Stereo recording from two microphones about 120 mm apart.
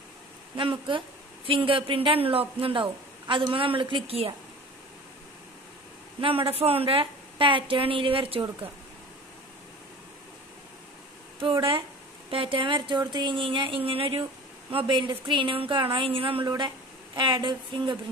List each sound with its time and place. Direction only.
0.6 s a woman's voice: 45° right (ahead or behind)
6.2 s a woman's voice: 50° right (ahead or behind)
12.3 s a woman's voice: 45° right (ahead or behind)
16.4 s speech: 35° right (ahead or behind)